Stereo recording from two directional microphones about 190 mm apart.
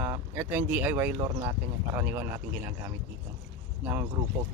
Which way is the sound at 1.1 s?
20° right (ahead or behind).